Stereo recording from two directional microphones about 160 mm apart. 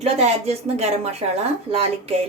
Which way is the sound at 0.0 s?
40° right (ahead or behind).